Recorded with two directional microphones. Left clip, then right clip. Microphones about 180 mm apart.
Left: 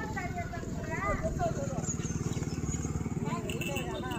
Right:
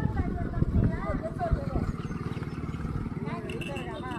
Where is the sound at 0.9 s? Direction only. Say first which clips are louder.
Left 1 dB; 35° left (ahead or behind).